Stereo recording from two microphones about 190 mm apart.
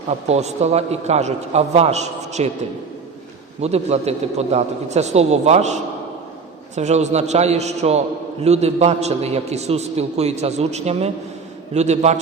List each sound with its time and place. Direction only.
0.1 s a man's voice: 35° right (ahead or behind)
3.6 s a man's voice: 35° right (ahead or behind)